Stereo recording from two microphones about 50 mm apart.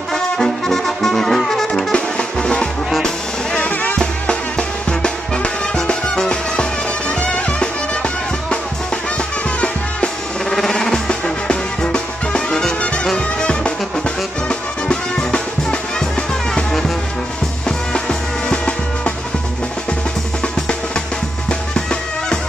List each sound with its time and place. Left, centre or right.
0.1 s brass instrument: centre
1.9 s music: centre
3.5 s music: left
4.0 s music: centre
10.5 s music: centre
17.6 s music: centre